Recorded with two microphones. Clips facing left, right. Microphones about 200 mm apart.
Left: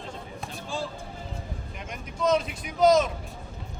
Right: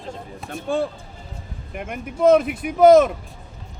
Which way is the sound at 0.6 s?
60° right (ahead or behind).